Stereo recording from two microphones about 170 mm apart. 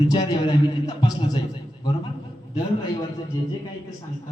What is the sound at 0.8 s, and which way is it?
Speech, 25° left (ahead or behind).